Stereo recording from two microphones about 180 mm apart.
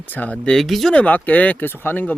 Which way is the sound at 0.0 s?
10° left (ahead or behind).